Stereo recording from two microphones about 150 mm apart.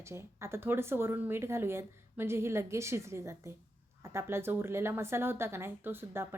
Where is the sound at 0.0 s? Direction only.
15° right (ahead or behind).